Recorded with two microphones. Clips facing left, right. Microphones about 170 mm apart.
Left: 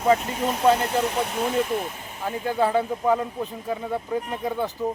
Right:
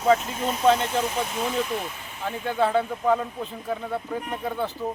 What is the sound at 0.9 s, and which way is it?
Speech, 65° left (ahead or behind).